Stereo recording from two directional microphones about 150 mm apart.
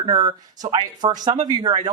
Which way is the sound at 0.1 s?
25° right (ahead or behind).